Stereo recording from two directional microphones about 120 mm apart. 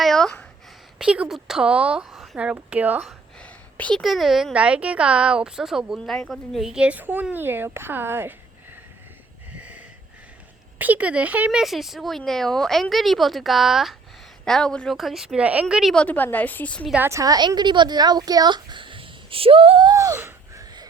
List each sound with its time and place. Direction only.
0.0 s a sound: 5° left (ahead or behind)
0.9 s speech: 10° right (ahead or behind)
3.4 s a sound: 10° left (ahead or behind)
4.0 s speech: centre (ahead or behind); by 8.4 s 20° right (ahead or behind)
9.6 s wheeze: 10° right (ahead or behind)
10.8 s speech: 15° right (ahead or behind)
11.6 s speech: centre (ahead or behind)
15.7 s a woman's voice: centre (ahead or behind)
17.0 s a woman's voice: 25° right (ahead or behind); by 19.9 s 45° right (ahead or behind)
19.9 s a sound: 30° right (ahead or behind)